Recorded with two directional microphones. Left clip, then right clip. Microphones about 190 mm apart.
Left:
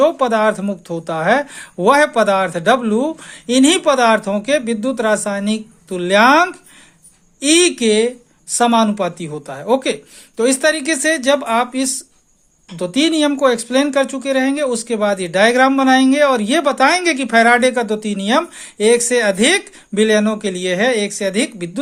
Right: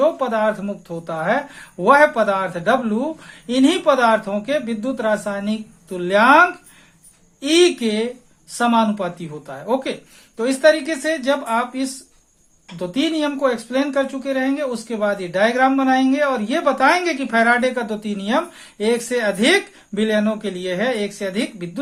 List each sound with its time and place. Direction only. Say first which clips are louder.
0.0 s speech: left 4 dB; 40° left (ahead or behind)